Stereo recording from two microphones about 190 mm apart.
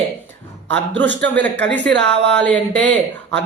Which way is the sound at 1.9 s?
65° right (ahead or behind).